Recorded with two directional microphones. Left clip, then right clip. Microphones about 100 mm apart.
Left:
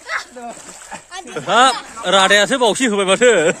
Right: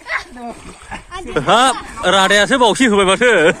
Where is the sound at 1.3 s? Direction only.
40° right (ahead or behind).